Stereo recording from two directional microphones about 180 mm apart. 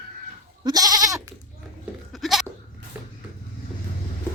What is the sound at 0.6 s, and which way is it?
Goat, 20° right (ahead or behind).